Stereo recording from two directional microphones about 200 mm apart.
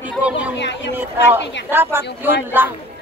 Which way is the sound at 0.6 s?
60° left (ahead or behind).